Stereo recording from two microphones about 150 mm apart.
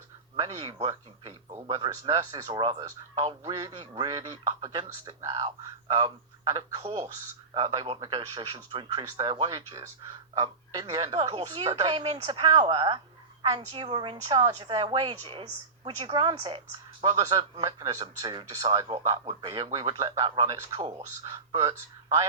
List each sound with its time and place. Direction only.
0.3 s speech: 35° right (ahead or behind)
7.5 s speech: 30° right (ahead or behind)
17.6 s speech: 25° right (ahead or behind)